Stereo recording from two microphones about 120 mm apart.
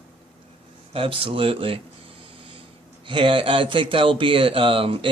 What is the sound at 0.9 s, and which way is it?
Speech, 50° right (ahead or behind).